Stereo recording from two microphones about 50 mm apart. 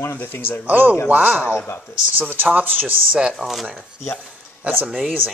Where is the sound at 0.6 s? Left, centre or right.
Right.